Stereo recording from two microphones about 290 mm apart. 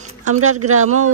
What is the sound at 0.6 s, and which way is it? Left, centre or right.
Speech, right.